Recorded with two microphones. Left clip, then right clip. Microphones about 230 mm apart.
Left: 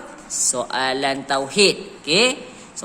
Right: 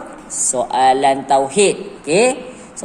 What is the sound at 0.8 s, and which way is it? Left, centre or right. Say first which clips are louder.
Speech: right 10 dB; left.